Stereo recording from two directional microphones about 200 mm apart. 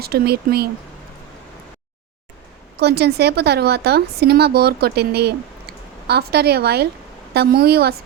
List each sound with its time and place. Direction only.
0.0 s a woman's voice: 50° right (ahead or behind)
2.7 s a woman's voice: 55° right (ahead or behind)